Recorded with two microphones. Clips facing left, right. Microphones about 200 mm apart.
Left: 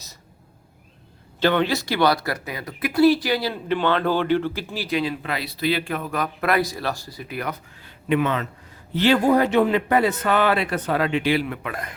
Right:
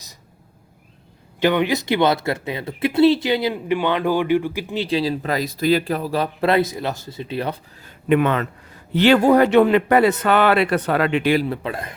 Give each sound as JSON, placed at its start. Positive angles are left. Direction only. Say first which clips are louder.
{"t": 1.4, "sound": "speech", "louder": "right 2 dB", "side_deg": -15}
{"t": 7.9, "sound": "speech", "louder": "right 4 dB", "side_deg": -55}
{"t": 11.3, "sound": "a man's voice", "louder": "right 4 dB", "side_deg": -35}